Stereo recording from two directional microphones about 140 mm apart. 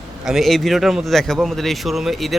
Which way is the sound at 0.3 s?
Centre (ahead or behind).